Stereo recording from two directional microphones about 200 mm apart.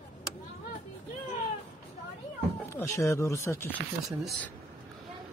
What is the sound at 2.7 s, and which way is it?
Speech, 15° left (ahead or behind).